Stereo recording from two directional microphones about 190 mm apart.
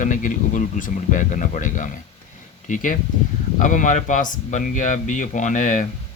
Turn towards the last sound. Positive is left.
turn(degrees=40)  # may be behind; listen again after turning